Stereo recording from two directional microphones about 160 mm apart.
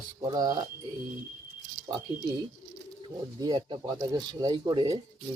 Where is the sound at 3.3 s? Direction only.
25° right (ahead or behind).